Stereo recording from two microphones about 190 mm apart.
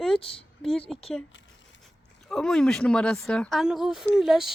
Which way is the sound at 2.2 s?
5° left (ahead or behind).